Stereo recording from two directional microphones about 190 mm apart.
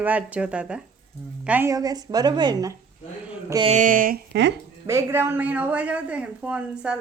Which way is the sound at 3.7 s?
45° right (ahead or behind).